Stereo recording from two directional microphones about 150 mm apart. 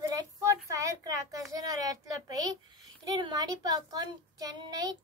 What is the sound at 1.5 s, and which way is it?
A child's voice, 25° right (ahead or behind).